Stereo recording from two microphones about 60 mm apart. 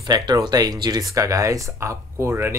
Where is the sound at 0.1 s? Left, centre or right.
Right.